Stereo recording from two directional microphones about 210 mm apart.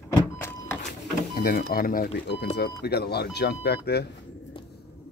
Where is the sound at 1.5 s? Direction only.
45° left (ahead or behind).